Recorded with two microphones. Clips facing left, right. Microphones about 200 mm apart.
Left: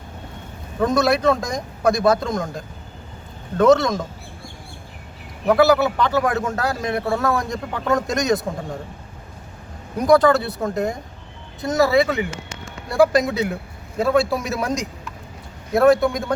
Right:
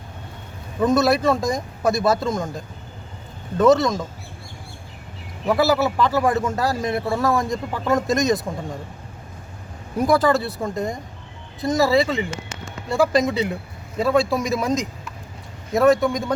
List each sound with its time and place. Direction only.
0.8 s a man's voice: centre (ahead or behind)
3.6 s a man's voice: centre (ahead or behind)
5.5 s a man's voice: centre (ahead or behind)
10.0 s a man's voice: 5° right (ahead or behind)